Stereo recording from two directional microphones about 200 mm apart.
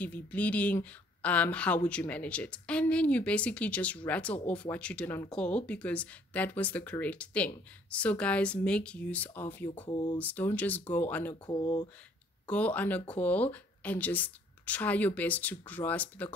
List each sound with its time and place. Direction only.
0.0 s speech: 5° left (ahead or behind)
9.8 s speech: 20° left (ahead or behind)
10.1 s speech: 10° left (ahead or behind)
11.4 s speech: 20° left (ahead or behind)
12.4 s speech: 5° left (ahead or behind)